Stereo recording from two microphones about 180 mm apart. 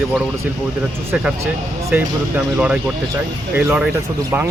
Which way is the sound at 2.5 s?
5° right (ahead or behind).